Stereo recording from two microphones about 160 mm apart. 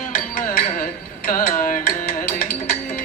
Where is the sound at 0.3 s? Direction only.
60° left (ahead or behind).